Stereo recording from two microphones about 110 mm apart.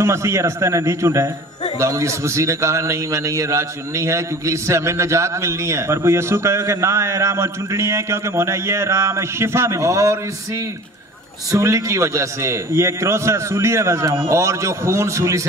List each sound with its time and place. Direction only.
0.0 s a man's voice: 25° right (ahead or behind)
11.5 s a man's voice: 25° right (ahead or behind)